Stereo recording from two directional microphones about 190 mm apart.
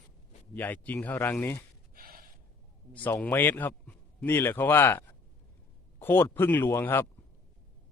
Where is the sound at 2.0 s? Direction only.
50° right (ahead or behind).